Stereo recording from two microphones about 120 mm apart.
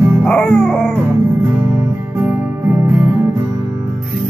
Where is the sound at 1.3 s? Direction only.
20° right (ahead or behind).